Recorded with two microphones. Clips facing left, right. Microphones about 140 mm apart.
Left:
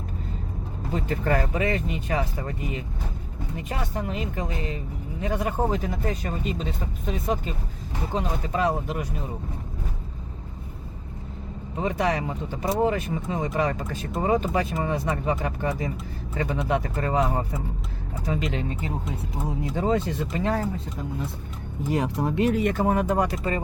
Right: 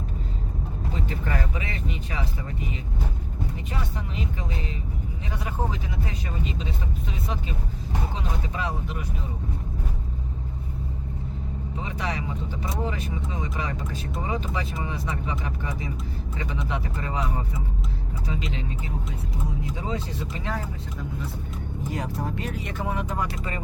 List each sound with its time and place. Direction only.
0.9 s speech: 45° left (ahead or behind)
3.7 s speech: 45° left (ahead or behind)
8.1 s speech: 40° left (ahead or behind)
11.8 s speech: 45° left (ahead or behind)
19.7 s speech: 50° left (ahead or behind)
22.0 s speech: 65° left (ahead or behind); by 23.6 s 40° left (ahead or behind)